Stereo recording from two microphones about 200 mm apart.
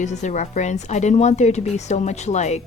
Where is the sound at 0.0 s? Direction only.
35° left (ahead or behind).